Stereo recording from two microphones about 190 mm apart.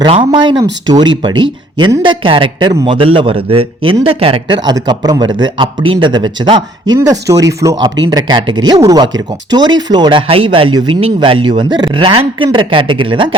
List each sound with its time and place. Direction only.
0.0 s speech: 25° right (ahead or behind)